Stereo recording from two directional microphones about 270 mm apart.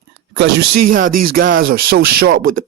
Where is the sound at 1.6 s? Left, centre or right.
Right.